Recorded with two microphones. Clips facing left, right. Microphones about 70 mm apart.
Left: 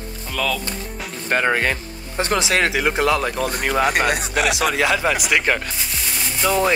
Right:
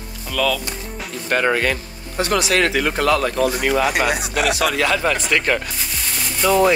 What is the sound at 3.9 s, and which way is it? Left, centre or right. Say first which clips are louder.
Speech: even; left.